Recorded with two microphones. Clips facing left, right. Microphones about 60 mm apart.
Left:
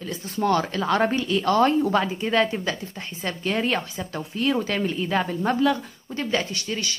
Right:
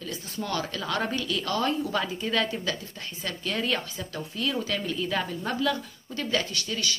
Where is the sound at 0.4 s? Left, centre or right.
Left.